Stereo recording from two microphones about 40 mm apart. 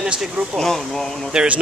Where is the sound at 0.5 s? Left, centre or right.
Centre.